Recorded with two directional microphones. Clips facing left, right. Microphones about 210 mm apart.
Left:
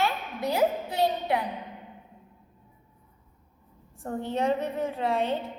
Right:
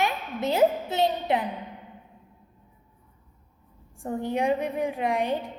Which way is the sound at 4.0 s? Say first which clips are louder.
Right 2 dB; 15° right (ahead or behind).